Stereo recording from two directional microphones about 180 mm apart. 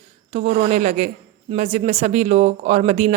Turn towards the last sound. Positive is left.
turn(degrees=-40)  # may be behind; listen again after turning